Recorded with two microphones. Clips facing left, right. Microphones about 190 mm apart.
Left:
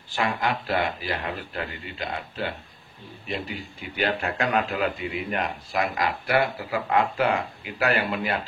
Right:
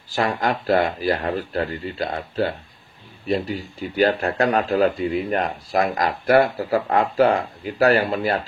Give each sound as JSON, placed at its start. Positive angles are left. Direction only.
{"t": 0.1, "sound": "speech", "side_deg": -40}